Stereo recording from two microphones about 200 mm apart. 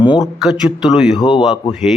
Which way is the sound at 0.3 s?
Centre (ahead or behind).